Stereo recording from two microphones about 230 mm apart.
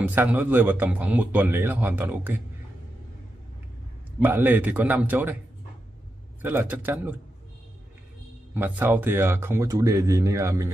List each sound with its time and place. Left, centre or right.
0.0 s speech: centre
4.2 s speech: centre
6.4 s speech: centre
8.5 s speech: centre